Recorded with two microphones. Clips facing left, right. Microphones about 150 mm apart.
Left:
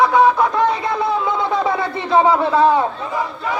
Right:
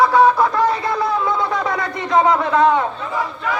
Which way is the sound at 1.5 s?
25° left (ahead or behind).